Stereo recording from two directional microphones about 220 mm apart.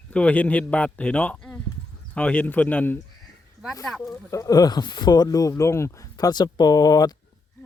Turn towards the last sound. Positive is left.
turn(degrees=15)  # may be behind; listen again after turning